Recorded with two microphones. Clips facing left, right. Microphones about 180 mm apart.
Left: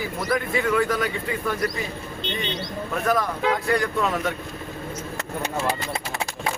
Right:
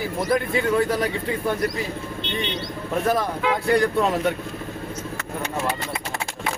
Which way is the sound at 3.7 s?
30° right (ahead or behind).